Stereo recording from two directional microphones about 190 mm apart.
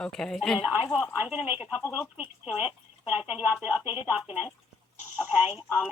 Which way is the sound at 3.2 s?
5° right (ahead or behind).